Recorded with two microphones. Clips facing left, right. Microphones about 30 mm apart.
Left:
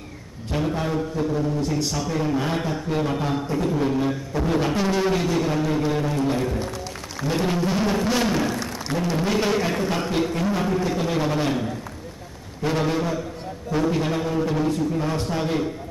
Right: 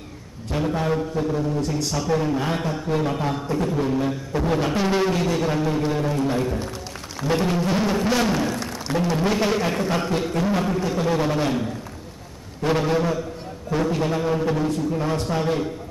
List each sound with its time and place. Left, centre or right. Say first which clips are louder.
0.6 s music: right 1 dB; centre
8.3 s a man's voice: even; centre
10.1 s music: right 1 dB; centre
12.6 s music: right 2 dB; centre